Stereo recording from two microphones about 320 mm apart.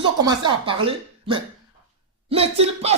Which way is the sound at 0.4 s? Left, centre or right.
Centre.